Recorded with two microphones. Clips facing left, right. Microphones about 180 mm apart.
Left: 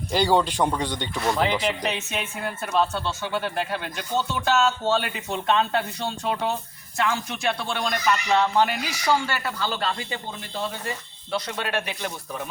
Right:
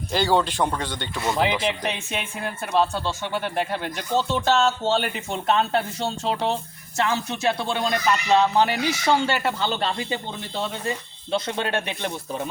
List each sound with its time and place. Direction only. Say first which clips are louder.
0.1 s speech: even; 10° left (ahead or behind)
1.1 s speech: right 1 dB; centre (ahead or behind)
3.5 s speech: right 2 dB; 20° right (ahead or behind)